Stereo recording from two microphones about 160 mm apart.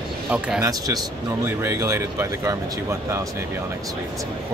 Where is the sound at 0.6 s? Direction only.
25° right (ahead or behind).